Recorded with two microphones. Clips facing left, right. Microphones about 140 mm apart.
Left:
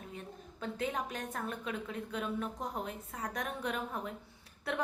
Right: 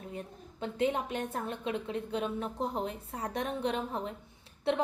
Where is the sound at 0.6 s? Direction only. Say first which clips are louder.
Right 6 dB; 30° right (ahead or behind).